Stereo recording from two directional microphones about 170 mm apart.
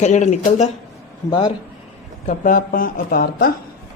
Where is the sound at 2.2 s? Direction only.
55° left (ahead or behind).